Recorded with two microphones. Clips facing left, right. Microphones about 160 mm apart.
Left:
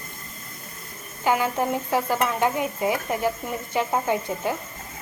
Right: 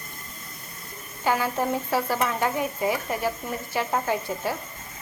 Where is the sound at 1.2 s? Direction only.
15° left (ahead or behind).